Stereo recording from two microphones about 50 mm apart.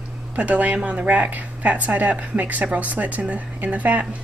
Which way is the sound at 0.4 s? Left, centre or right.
Right.